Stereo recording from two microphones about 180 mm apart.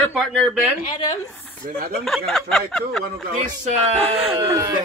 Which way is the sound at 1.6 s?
50° right (ahead or behind).